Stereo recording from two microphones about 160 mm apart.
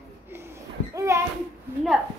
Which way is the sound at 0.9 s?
20° right (ahead or behind).